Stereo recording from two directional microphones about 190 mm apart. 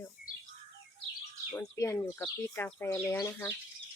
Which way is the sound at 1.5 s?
15° left (ahead or behind).